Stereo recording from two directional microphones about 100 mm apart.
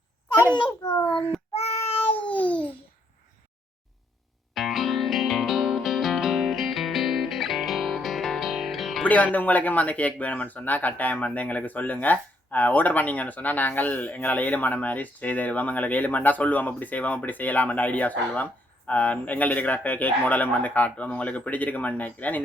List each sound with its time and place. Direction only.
0.9 s speech: 15° left (ahead or behind)
1.5 s a sound: 90° left; by 2.3 s 60° left (ahead or behind)
2.3 s babbling: 15° left (ahead or behind)
4.5 s music: centre (ahead or behind)
9.0 s speech: 15° left (ahead or behind)